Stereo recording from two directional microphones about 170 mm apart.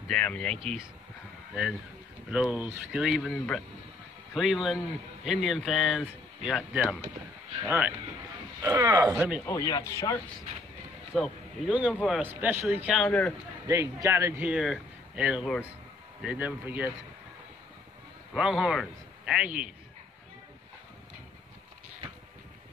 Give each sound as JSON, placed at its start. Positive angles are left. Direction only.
{"t": 0.1, "sound": "speech", "side_deg": 5}
{"t": 7.6, "sound": "a man's voice", "side_deg": -10}
{"t": 9.5, "sound": "speech", "side_deg": 20}
{"t": 11.1, "sound": "speech", "side_deg": 0}
{"t": 12.3, "sound": "a man's voice", "side_deg": -15}
{"t": 13.7, "sound": "a man's voice", "side_deg": -20}
{"t": 18.3, "sound": "a man's voice", "side_deg": 0}